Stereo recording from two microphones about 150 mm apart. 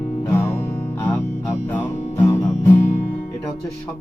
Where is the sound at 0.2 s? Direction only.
15° left (ahead or behind).